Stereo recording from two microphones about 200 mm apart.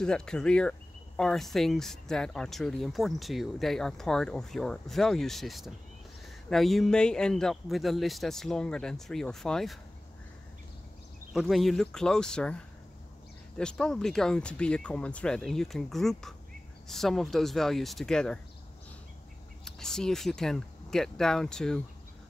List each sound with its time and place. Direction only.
0.0 s speech: 5° left (ahead or behind)
11.3 s speech: centre (ahead or behind)
19.6 s speech: centre (ahead or behind)